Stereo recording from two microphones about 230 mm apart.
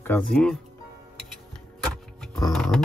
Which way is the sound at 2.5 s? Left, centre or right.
Centre.